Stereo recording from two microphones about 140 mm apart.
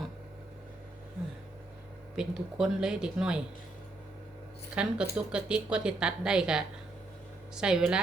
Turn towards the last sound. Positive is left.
turn(degrees=-5)  # may be behind; listen again after turning